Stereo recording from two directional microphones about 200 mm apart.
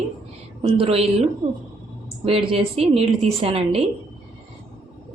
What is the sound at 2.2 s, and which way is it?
A woman's voice, 30° right (ahead or behind).